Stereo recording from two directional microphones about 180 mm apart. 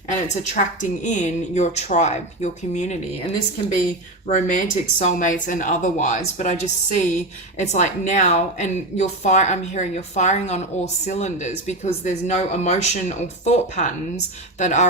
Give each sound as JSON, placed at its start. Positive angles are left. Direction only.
{"t": 0.1, "sound": "speech", "side_deg": 45}
{"t": 4.3, "sound": "speech", "side_deg": 40}